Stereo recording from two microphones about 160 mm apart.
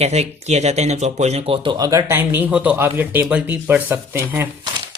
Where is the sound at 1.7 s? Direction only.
20° right (ahead or behind).